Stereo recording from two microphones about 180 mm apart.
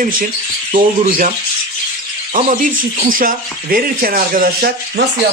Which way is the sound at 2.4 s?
40° right (ahead or behind).